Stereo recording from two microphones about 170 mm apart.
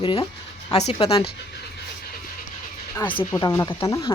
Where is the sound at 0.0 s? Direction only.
30° left (ahead or behind).